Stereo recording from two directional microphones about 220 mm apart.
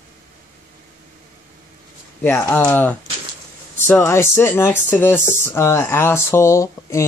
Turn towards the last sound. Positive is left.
turn(degrees=15)  # may be behind; listen again after turning